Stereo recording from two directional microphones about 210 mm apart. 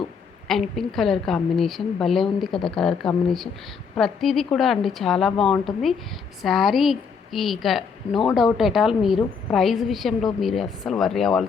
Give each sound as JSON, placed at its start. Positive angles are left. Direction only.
{"t": 0.4, "sound": "a woman's voice", "side_deg": 0}